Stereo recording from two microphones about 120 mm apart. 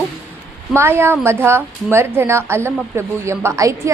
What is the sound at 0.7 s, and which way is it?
A woman's voice, 20° right (ahead or behind).